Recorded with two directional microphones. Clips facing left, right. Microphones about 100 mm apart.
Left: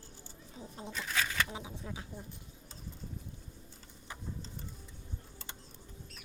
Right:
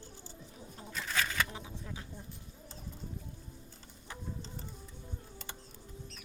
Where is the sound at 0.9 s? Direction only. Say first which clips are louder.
Right 1 dB; centre (ahead or behind).